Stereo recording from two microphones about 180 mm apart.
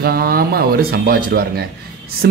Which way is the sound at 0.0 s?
60° right (ahead or behind).